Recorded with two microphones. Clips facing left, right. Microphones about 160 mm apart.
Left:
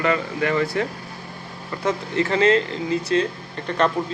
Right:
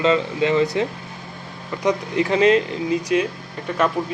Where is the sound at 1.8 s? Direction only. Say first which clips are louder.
Right 2 dB; 15° right (ahead or behind).